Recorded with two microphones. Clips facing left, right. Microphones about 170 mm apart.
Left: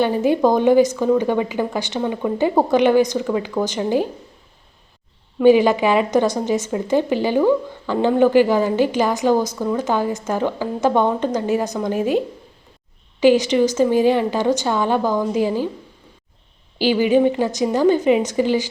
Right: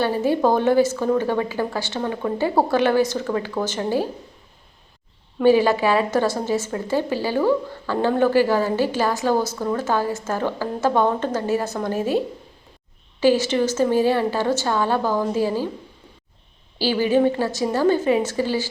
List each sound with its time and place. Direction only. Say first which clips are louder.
0.0 s a woman's voice: left 3 dB; 15° left (ahead or behind)
5.4 s a woman's voice: left 3 dB; 15° left (ahead or behind)
16.7 s a woman's voice: left 3 dB; 15° left (ahead or behind)